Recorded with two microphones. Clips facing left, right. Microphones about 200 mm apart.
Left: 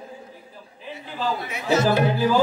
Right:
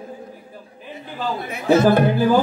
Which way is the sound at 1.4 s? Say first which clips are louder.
Right 7 dB; 55° right (ahead or behind).